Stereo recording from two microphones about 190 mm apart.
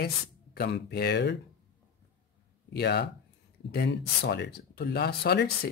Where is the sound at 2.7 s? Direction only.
60° left (ahead or behind).